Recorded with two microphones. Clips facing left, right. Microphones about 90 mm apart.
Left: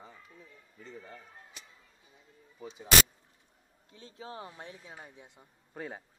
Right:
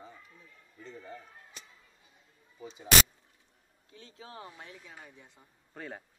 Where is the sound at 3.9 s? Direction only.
25° left (ahead or behind).